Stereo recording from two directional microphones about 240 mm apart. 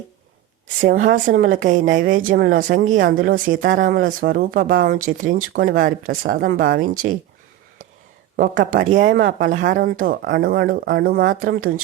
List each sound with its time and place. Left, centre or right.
0.8 s speech: right
8.4 s speech: right